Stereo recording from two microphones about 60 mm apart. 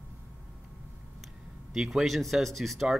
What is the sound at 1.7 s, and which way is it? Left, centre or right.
Speech, centre.